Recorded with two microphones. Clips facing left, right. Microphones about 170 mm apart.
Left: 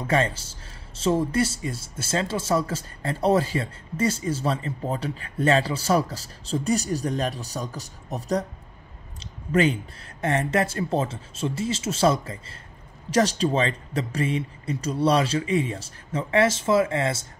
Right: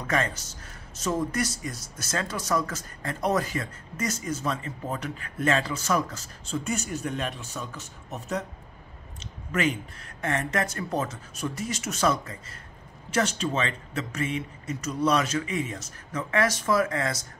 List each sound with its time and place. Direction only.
0.0 s speech: 30° left (ahead or behind)
9.2 s a sound: 35° left (ahead or behind)
10.2 s speech: 30° left (ahead or behind)